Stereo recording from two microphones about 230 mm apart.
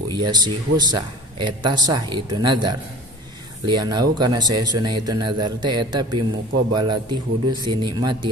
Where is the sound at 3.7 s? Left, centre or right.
Centre.